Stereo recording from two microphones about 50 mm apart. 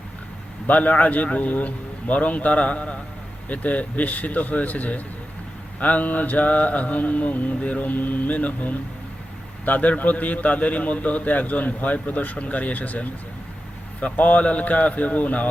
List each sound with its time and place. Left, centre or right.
0.7 s a man's voice: left